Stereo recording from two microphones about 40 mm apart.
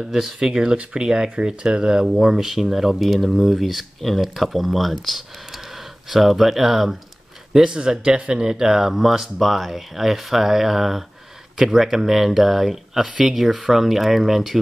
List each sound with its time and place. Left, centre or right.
0.0 s speech: centre
7.5 s speech: centre